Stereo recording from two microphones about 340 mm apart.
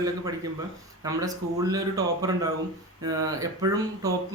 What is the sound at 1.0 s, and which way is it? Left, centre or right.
Speech, centre.